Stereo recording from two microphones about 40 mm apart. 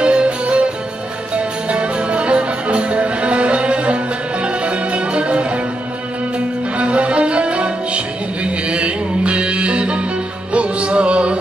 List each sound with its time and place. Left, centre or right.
0.0 s music: right